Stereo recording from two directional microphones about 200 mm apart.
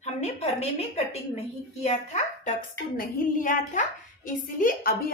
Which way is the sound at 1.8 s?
35° left (ahead or behind).